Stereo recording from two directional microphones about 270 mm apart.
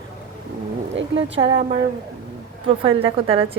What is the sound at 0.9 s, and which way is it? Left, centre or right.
Speech, right.